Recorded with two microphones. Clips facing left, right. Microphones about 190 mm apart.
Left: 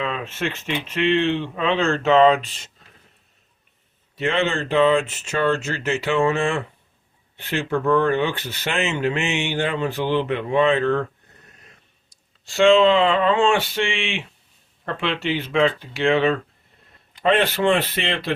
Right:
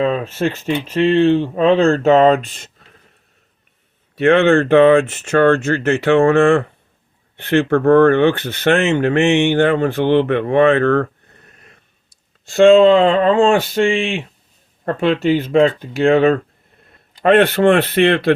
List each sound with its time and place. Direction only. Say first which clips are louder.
0.0 s speech: right 9 dB; 40° right (ahead or behind)
4.1 s speech: right 11 dB; 60° right (ahead or behind)
12.5 s speech: right 6 dB; 50° right (ahead or behind)
17.2 s speech: right 7 dB; 60° right (ahead or behind)